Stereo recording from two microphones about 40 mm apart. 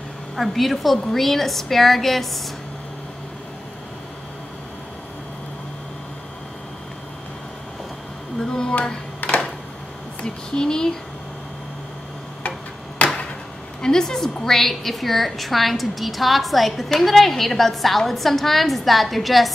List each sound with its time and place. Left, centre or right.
0.4 s a woman's voice: centre
8.5 s speech: left
9.2 s a sound: left
10.2 s speech: centre
13.0 s a sound: left
13.7 s a woman's voice: centre